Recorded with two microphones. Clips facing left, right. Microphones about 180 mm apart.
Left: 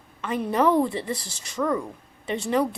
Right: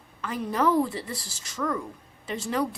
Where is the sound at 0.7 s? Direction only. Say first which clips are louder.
Left 3 dB; 25° left (ahead or behind).